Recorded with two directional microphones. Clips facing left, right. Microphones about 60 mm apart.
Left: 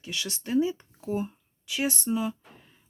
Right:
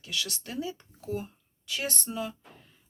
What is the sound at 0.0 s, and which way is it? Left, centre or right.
Speech, left.